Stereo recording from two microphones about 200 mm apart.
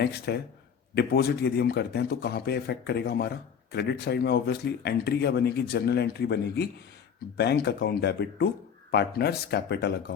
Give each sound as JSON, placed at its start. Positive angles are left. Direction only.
{"t": 0.0, "sound": "a man's voice", "side_deg": 55}